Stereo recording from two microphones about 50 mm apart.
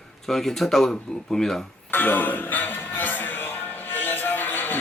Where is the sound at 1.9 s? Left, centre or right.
Left.